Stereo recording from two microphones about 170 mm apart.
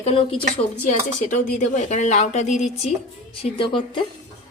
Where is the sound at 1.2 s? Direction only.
45° left (ahead or behind).